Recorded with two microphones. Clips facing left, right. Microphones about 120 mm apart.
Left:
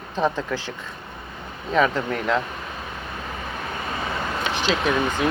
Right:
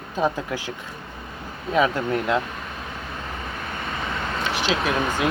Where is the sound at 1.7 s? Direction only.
10° right (ahead or behind).